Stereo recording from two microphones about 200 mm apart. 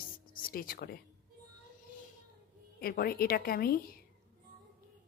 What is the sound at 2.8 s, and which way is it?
A woman's voice, 50° left (ahead or behind).